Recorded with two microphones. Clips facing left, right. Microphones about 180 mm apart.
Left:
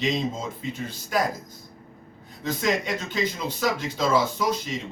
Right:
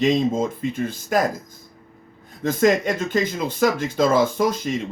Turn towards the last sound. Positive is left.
turn(degrees=-50)  # may be behind; listen again after turning